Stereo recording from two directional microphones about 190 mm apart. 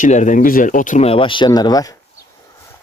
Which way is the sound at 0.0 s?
40° left (ahead or behind).